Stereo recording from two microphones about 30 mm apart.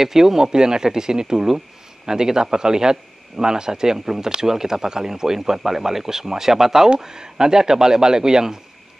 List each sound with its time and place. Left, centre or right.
0.0 s a man's voice: centre
7.0 s a man's voice: right